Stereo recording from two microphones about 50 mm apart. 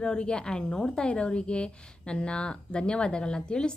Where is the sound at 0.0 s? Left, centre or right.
Centre.